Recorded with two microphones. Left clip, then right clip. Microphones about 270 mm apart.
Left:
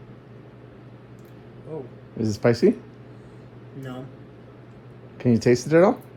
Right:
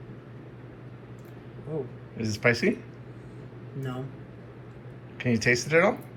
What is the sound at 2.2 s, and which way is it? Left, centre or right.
Speech, centre.